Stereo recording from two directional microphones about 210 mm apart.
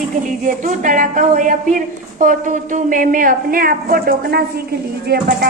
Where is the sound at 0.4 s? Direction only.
40° right (ahead or behind).